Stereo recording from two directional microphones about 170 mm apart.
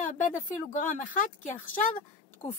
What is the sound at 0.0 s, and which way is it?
Speech, 50° left (ahead or behind).